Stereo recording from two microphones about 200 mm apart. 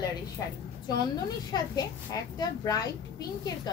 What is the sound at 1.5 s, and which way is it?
A child's voice, 20° left (ahead or behind).